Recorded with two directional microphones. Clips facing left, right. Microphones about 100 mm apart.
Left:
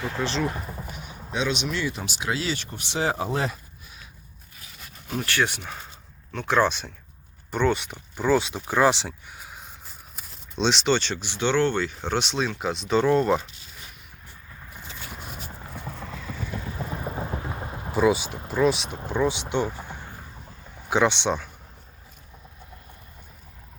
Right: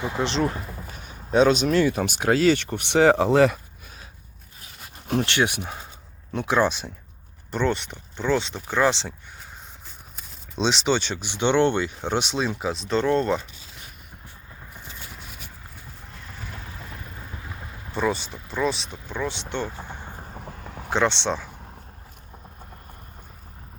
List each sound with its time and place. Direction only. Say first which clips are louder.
0.0 s speech: right 2 dB; 20° right (ahead or behind)
0.7 s clip-clop: left 2 dB; 15° left (ahead or behind)
1.3 s speech: right 9 dB; 45° right (ahead or behind); by 3.6 s 75° right (ahead or behind)
5.2 s speech: left 2 dB; 20° right (ahead or behind); by 9.5 s 10° left (ahead or behind)
10.2 s speech: even; centre (ahead or behind)
12.5 s speech: left 1 dB; centre (ahead or behind)
15.2 s a sound: left 4 dB; 40° left (ahead or behind)
15.7 s clip-clop: left 8 dB; 80° left
17.0 s thunder: left 9 dB; 55° left (ahead or behind)
17.4 s a sound: left 6 dB; 35° left (ahead or behind)
17.9 s speech: left 4 dB; 5° left (ahead or behind)
20.4 s a sound: right 7 dB; 85° right
20.9 s speech: left 1 dB; 5° left (ahead or behind)